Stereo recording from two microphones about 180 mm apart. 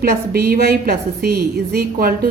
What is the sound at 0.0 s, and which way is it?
A woman's voice, 55° right (ahead or behind).